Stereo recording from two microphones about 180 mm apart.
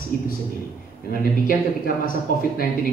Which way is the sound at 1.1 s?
55° left (ahead or behind).